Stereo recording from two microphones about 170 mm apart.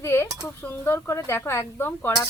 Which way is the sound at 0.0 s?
15° left (ahead or behind).